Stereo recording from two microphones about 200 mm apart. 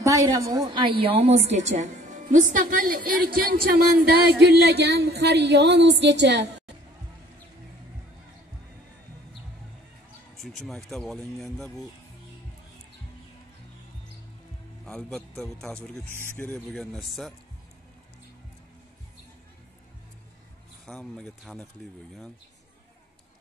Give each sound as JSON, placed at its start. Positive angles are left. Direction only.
{"t": 0.0, "sound": "a woman's voice", "side_deg": -15}
{"t": 3.4, "sound": "a sound", "side_deg": -50}
{"t": 10.3, "sound": "speech", "side_deg": 0}
{"t": 14.9, "sound": "speech", "side_deg": 5}
{"t": 20.8, "sound": "speech", "side_deg": 0}